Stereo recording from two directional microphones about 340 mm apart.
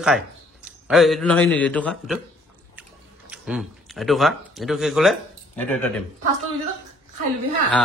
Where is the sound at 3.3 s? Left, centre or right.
Centre.